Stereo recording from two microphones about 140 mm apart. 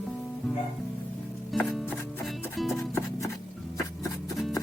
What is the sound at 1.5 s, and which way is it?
Music, centre (ahead or behind).